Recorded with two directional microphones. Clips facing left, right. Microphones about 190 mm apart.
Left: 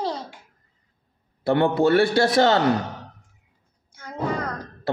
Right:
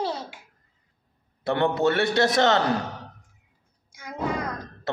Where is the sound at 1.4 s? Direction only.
30° left (ahead or behind).